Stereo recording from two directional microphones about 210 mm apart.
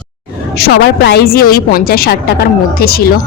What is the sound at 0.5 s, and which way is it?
A woman's voice, 55° left (ahead or behind).